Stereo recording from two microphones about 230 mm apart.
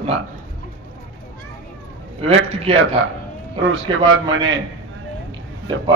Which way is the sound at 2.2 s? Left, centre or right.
Right.